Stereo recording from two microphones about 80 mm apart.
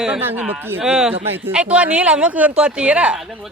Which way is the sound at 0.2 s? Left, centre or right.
Right.